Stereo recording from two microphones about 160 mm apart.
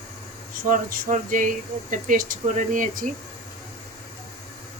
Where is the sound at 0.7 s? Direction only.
60° right (ahead or behind).